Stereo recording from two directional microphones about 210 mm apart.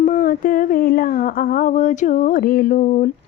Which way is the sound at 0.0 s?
40° left (ahead or behind).